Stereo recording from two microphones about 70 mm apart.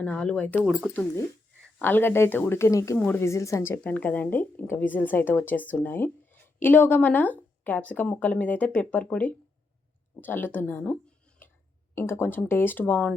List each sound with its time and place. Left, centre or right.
0.0 s speech: centre
1.8 s speech: left
2.6 s speech: left
3.8 s speech: left
11.4 s a sound: left
11.9 s speech: left